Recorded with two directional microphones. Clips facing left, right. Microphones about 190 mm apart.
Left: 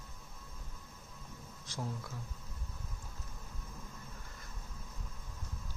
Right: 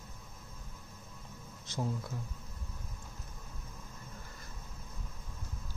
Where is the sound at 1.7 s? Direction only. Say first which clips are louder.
Right 5 dB; 20° right (ahead or behind).